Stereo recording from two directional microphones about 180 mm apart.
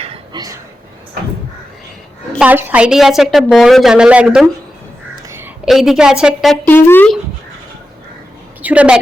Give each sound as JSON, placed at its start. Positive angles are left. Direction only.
{"t": 0.0, "sound": "a sound", "side_deg": -30}
{"t": 2.4, "sound": "a woman's voice", "side_deg": -10}
{"t": 5.6, "sound": "a woman's voice", "side_deg": 0}
{"t": 6.7, "sound": "speech", "side_deg": 10}
{"t": 8.6, "sound": "a woman's voice", "side_deg": -5}